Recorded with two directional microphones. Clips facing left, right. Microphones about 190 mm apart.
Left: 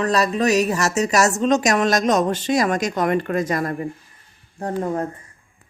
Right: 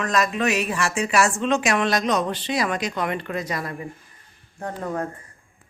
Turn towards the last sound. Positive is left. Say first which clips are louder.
# left 5 dB
turn(degrees=30)  # may be behind; listen again after turning